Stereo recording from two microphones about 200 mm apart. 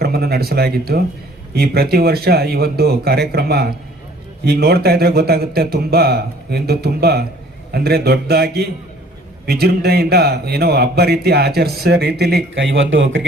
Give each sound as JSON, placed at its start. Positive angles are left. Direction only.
{"t": 0.0, "sound": "a man's voice", "side_deg": -50}
{"t": 12.5, "sound": "speech", "side_deg": -70}